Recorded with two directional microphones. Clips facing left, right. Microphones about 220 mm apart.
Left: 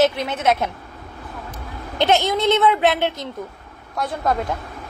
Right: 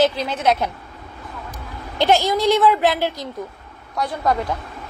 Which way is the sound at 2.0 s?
20° left (ahead or behind).